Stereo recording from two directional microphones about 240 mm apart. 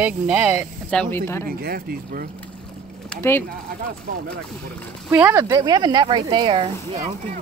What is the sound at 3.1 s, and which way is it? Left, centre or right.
Speech, centre.